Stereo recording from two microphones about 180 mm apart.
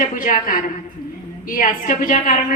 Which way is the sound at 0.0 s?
50° left (ahead or behind).